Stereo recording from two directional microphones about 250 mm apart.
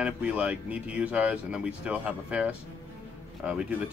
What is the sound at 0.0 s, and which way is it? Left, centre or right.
Speech, centre.